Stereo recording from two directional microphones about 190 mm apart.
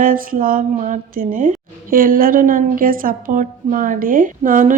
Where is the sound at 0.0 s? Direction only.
45° right (ahead or behind).